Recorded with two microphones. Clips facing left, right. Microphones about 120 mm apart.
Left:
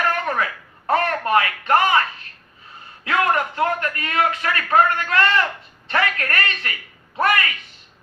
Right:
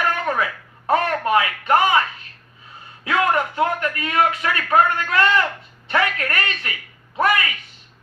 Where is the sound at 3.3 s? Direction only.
20° right (ahead or behind).